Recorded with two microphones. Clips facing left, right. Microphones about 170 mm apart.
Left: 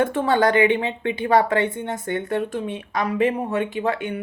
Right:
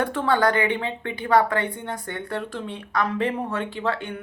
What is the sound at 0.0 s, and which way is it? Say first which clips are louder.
A woman's voice: left 3 dB; 20° left (ahead or behind).